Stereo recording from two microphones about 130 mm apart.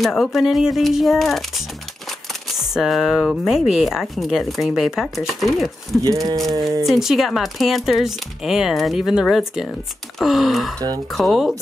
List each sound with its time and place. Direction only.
0.0 s speech: centre (ahead or behind)
2.7 s speech: centre (ahead or behind)
6.0 s speech: 30° right (ahead or behind)
6.9 s speech: centre (ahead or behind)